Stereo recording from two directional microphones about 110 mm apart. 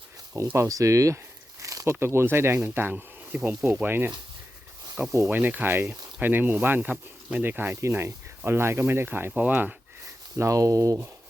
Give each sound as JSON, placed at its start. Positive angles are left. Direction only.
{"t": 0.3, "sound": "speech", "side_deg": -25}
{"t": 10.3, "sound": "speech", "side_deg": -30}